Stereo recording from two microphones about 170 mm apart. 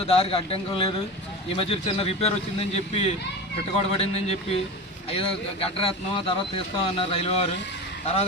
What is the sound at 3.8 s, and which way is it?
Speech, 35° left (ahead or behind).